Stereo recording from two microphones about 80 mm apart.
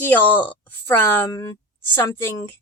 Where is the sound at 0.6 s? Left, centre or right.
Left.